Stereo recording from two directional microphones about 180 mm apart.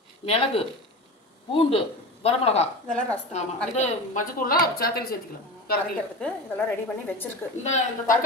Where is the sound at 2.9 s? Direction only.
5° left (ahead or behind).